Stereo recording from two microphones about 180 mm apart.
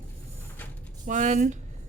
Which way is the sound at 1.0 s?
45° right (ahead or behind).